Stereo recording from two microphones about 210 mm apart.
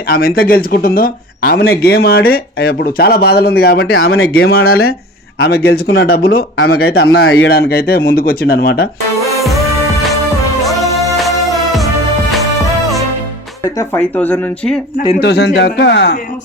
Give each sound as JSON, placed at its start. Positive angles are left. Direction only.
{"t": 0.1, "sound": "speech", "side_deg": 45}
{"t": 3.8, "sound": "speech", "side_deg": 65}
{"t": 4.0, "sound": "speech", "side_deg": 50}
{"t": 7.4, "sound": "speech", "side_deg": 50}
{"t": 13.7, "sound": "speech", "side_deg": 10}
{"t": 15.2, "sound": "speech", "side_deg": 50}